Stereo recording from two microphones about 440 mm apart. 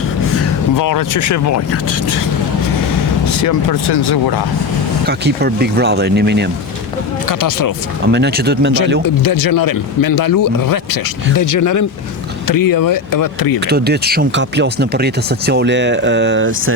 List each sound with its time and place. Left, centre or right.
0.8 s speech: left
3.4 s speech: left
3.8 s speech: left
5.0 s speech: right
7.3 s speech: left
8.1 s speech: right
9.0 s speech: left
13.7 s speech: right